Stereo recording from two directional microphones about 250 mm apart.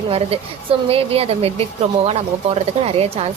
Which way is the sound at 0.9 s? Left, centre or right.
Right.